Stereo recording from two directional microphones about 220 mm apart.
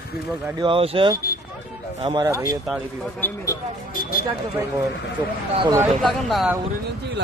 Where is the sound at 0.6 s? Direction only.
25° right (ahead or behind).